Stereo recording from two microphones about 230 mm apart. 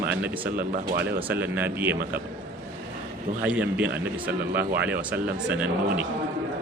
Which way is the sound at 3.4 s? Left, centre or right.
Centre.